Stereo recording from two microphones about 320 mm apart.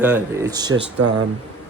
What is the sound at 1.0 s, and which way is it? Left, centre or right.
Speech, right.